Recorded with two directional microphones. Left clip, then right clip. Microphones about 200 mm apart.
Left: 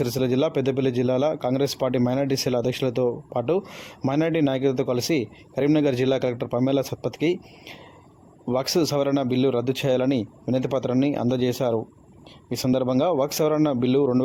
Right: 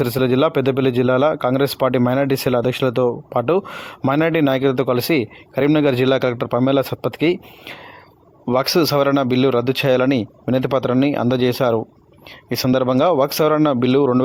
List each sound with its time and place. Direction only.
0.0 s a man's voice: 15° right (ahead or behind)